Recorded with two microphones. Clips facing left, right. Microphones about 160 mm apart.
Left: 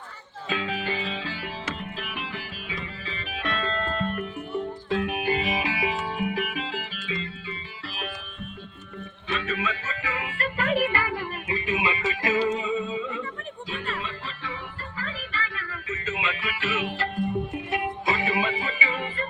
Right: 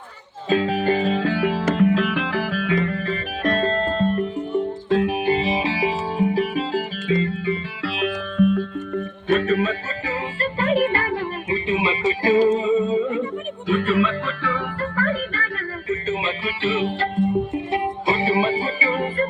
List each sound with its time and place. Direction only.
0.5 s music: 40° right (ahead or behind); by 1.6 s 65° right (ahead or behind)
1.7 s music: 90° right
2.7 s music: 55° right (ahead or behind)
7.9 s music: 85° right
9.3 s music: 45° right (ahead or behind)
12.5 s a sound: 30° right (ahead or behind)
13.7 s music: 70° right (ahead or behind); by 15.4 s 50° right (ahead or behind)
15.9 s music: 30° right (ahead or behind)